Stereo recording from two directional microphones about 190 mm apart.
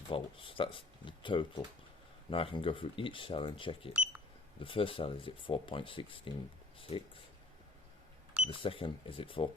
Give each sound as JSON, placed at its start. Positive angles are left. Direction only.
{"t": 0.1, "sound": "speech", "side_deg": 30}
{"t": 8.4, "sound": "speech", "side_deg": 25}